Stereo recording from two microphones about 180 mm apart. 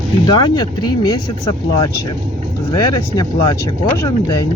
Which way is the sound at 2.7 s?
25° left (ahead or behind).